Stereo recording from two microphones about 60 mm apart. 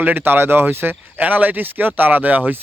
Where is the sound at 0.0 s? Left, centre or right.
Right.